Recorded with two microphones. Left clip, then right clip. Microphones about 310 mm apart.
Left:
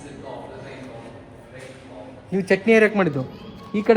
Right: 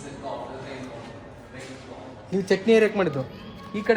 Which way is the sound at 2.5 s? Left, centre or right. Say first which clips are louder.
Left 3 dB; centre.